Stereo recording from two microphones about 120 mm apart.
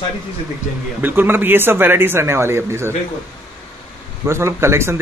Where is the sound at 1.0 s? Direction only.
15° right (ahead or behind).